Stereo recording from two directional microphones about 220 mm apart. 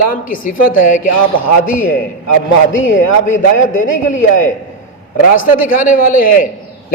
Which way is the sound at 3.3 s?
35° left (ahead or behind).